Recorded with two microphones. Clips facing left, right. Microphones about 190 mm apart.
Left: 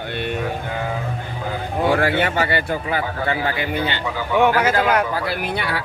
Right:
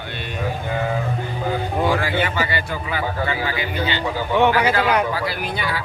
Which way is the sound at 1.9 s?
60° left (ahead or behind).